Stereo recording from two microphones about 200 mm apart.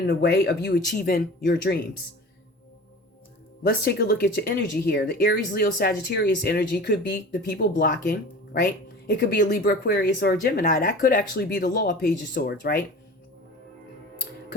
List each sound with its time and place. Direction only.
0.1 s speech: 55° left (ahead or behind)
3.6 s speech: 50° left (ahead or behind)